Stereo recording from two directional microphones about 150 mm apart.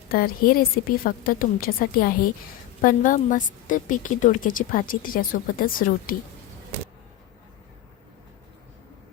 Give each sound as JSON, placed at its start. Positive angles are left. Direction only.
{"t": 0.1, "sound": "a woman's voice", "side_deg": 75}
{"t": 2.8, "sound": "a woman's voice", "side_deg": 60}